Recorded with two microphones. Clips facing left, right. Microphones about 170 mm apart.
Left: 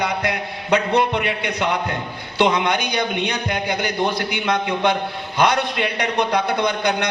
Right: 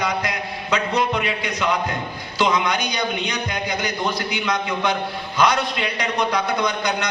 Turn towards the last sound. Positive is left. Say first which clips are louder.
# left 2 dB
turn(degrees=55)  # may be behind; listen again after turning